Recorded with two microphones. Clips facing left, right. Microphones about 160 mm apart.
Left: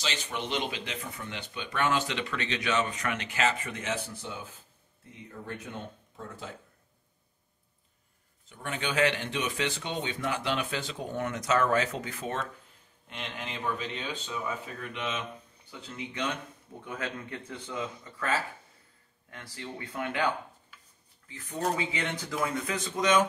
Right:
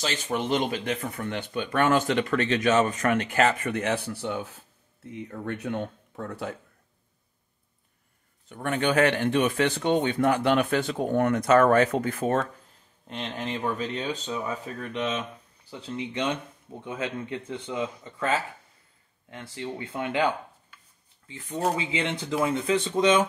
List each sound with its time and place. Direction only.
0.0 s speech: 50° right (ahead or behind); by 6.5 s 65° right (ahead or behind)
8.5 s speech: 60° right (ahead or behind)
13.1 s speech: 40° right (ahead or behind); by 20.2 s 25° right (ahead or behind)
21.3 s speech: 25° right (ahead or behind)